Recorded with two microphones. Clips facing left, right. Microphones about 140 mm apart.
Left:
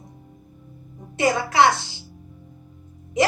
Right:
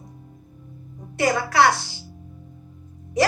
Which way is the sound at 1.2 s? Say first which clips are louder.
Left 1 dB; 20° left (ahead or behind).